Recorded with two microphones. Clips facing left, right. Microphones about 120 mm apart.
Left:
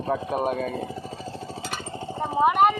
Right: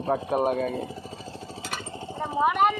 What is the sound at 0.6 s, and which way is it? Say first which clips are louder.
Speech: even; 40° left (ahead or behind).